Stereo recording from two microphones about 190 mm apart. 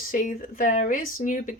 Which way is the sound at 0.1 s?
45° left (ahead or behind).